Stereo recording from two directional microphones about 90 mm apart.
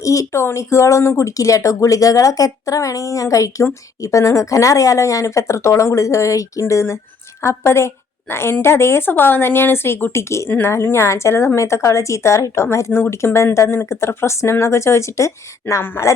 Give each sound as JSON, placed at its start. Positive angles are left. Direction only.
{"t": 0.0, "sound": "a woman's voice", "side_deg": 35}